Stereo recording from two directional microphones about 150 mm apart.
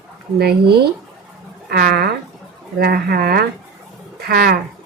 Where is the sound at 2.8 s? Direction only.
90° right.